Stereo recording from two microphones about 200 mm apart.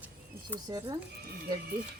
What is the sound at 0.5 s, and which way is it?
Speech, 20° right (ahead or behind).